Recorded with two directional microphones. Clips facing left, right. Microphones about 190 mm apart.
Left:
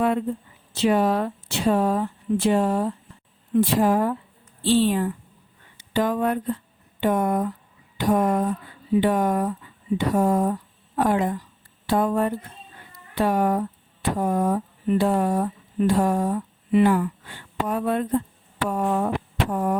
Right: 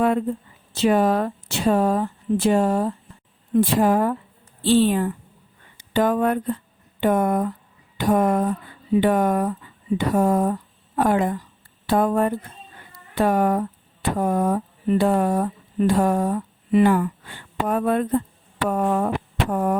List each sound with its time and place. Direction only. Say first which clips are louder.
0.7 s speech: right 2 dB; 45° right (ahead or behind)